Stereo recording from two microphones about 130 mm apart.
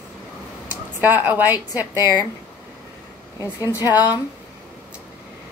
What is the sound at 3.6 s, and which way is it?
Speech, 25° left (ahead or behind).